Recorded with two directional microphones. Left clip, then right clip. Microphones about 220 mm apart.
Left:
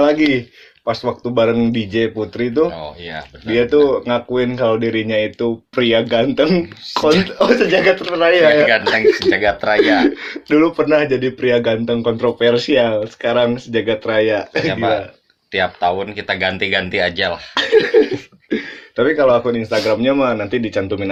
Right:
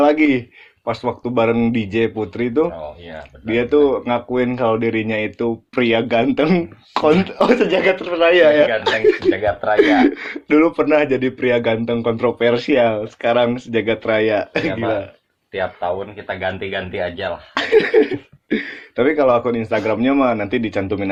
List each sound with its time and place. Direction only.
0.0 s speech: 20° right (ahead or behind)
9.3 s speech: 45° left (ahead or behind)
10.0 s speech: 25° right (ahead or behind)
15.5 s speech: 40° left (ahead or behind)
17.5 s speech: 25° right (ahead or behind)